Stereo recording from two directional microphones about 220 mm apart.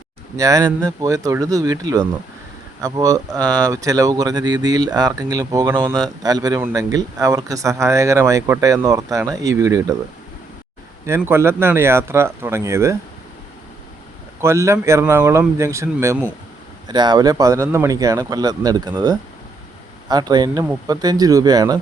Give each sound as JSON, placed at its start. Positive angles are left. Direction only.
{"t": 0.3, "sound": "speech", "side_deg": -15}
{"t": 11.0, "sound": "speech", "side_deg": -10}
{"t": 14.4, "sound": "speech", "side_deg": -15}